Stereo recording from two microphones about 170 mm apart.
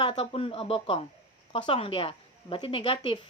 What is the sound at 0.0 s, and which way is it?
A woman's voice, 30° left (ahead or behind).